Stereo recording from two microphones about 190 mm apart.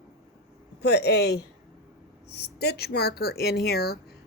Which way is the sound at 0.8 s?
60° left (ahead or behind).